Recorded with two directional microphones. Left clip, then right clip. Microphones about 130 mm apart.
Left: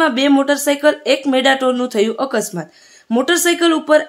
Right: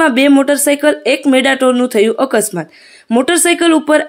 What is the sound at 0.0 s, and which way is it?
Speech, 25° right (ahead or behind).